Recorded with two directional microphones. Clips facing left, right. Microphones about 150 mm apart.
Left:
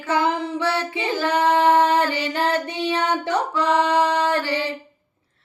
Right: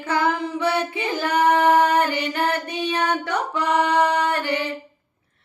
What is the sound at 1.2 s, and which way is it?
Female singing, 25° left (ahead or behind).